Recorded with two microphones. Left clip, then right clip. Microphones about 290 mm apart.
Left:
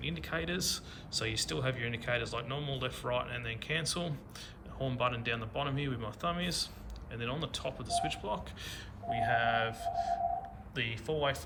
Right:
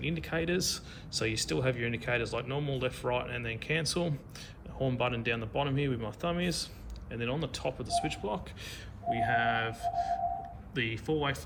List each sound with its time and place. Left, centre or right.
0.0 s speech: centre